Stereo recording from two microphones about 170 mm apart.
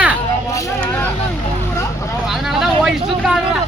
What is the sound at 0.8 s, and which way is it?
Vehicle, 10° left (ahead or behind).